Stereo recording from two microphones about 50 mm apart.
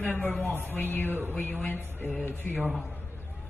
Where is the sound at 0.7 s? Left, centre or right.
Left.